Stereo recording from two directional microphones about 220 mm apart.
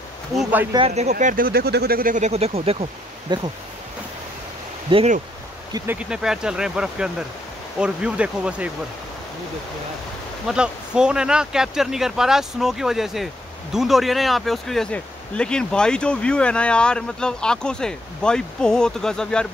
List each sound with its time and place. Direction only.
0.4 s speech: 5° right (ahead or behind)
0.7 s speech: 30° right (ahead or behind)
4.9 s speech: 30° right (ahead or behind)
5.7 s speech: 15° right (ahead or behind)
5.9 s speech: 5° right (ahead or behind)
10.4 s speech: 5° right (ahead or behind)